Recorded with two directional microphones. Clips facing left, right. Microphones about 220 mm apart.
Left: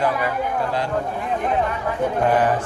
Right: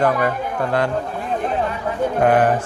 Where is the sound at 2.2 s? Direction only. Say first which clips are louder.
Right 4 dB; 55° right (ahead or behind).